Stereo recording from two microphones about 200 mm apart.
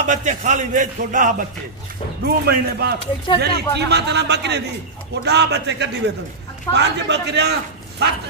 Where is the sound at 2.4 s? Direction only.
55° right (ahead or behind).